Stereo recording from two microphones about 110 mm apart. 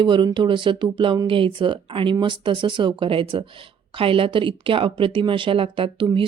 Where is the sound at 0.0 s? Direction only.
45° right (ahead or behind).